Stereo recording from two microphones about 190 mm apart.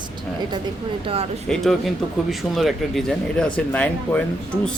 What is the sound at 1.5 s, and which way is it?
Speech, centre (ahead or behind).